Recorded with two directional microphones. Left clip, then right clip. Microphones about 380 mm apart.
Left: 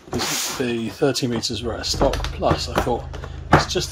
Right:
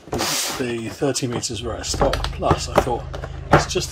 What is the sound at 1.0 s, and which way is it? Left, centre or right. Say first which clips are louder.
Speech: left 2 dB; centre.